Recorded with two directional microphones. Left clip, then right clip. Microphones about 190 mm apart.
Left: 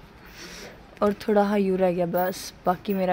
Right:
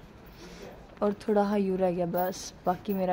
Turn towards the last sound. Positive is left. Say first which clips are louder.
# left 5 dB
turn(degrees=15)  # may be behind; listen again after turning